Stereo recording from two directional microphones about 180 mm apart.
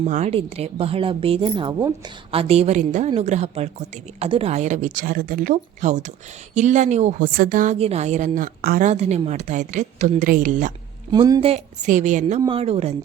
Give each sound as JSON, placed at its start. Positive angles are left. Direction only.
{"t": 0.0, "sound": "a woman's voice", "side_deg": -40}
{"t": 8.6, "sound": "a woman's voice", "side_deg": -60}
{"t": 8.9, "sound": "a woman's voice", "side_deg": -35}
{"t": 11.1, "sound": "a woman's voice", "side_deg": -25}
{"t": 11.9, "sound": "a woman's voice", "side_deg": -45}
{"t": 12.5, "sound": "a woman's voice", "side_deg": -30}